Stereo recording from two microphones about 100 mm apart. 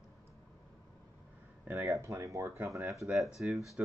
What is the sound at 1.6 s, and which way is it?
Speech, 25° right (ahead or behind).